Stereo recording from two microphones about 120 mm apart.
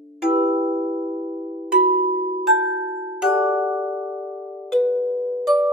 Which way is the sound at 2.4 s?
Centre (ahead or behind).